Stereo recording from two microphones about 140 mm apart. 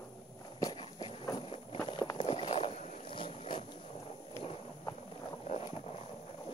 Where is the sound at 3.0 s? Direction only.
40° left (ahead or behind).